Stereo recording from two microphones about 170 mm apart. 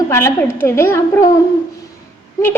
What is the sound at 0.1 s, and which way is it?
A woman's voice, 15° left (ahead or behind).